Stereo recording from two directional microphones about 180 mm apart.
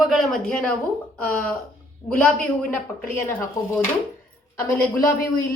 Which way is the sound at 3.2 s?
15° left (ahead or behind).